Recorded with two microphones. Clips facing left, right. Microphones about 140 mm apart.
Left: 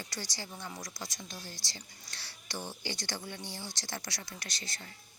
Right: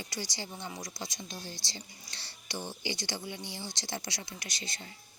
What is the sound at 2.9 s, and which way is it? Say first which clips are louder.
A woman's voice: right 4 dB; 15° right (ahead or behind).